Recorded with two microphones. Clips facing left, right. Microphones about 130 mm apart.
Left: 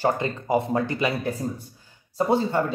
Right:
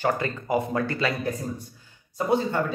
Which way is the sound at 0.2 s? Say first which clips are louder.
Left 2 dB; 25° left (ahead or behind).